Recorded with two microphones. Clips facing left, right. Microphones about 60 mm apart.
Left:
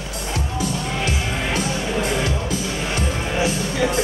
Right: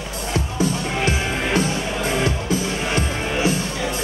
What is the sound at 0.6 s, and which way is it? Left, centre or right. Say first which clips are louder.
Music: right 4 dB; right.